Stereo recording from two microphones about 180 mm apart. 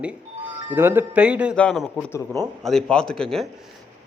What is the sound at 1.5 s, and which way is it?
A man's voice, 5° left (ahead or behind).